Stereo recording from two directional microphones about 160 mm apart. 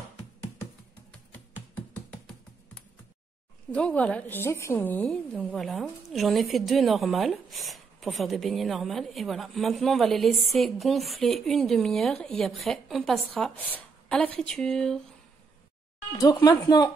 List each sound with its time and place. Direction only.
1.3 s computer keyboard: 10° left (ahead or behind)
3.7 s a woman's voice: 5° left (ahead or behind)
16.1 s speech: 25° left (ahead or behind)